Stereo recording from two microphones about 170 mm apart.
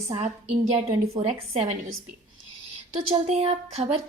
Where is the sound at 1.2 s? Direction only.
40° right (ahead or behind).